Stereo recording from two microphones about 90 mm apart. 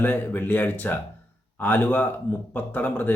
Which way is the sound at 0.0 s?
20° left (ahead or behind).